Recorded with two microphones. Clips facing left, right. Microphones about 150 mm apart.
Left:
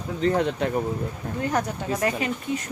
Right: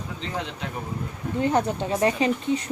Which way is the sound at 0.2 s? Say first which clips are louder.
Left 11 dB; 50° left (ahead or behind).